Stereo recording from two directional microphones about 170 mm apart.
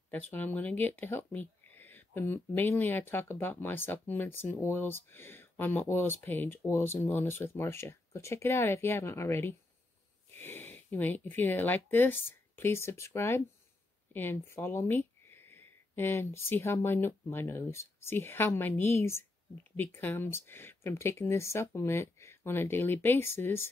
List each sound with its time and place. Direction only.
0.1 s speech: 10° left (ahead or behind)